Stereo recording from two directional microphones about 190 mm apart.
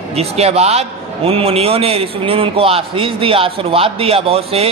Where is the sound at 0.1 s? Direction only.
35° right (ahead or behind).